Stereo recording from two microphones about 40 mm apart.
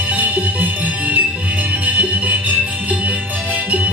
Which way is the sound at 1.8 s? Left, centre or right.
Right.